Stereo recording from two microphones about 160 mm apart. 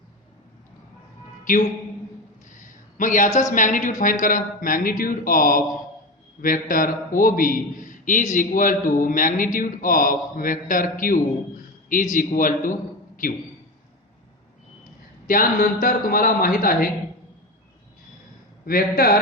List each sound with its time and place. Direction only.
2.5 s a sound: 55° left (ahead or behind)
3.5 s a man's voice: 55° left (ahead or behind)
15.3 s a man's voice: 60° left (ahead or behind)
18.6 s a man's voice: 65° left (ahead or behind)